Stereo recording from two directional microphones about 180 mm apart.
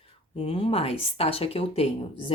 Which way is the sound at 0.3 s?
35° left (ahead or behind).